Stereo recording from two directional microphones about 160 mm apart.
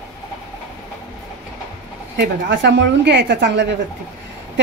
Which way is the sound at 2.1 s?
90° right.